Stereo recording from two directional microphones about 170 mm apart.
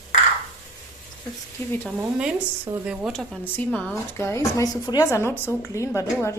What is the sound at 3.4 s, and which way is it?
Speech, 10° left (ahead or behind).